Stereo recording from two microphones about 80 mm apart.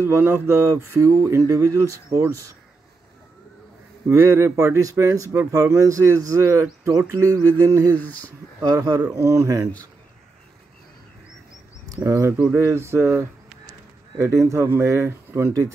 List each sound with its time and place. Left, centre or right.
0.0 s speech: right
4.1 s speech: right
7.9 s speech: centre
8.6 s speech: right
11.9 s speech: right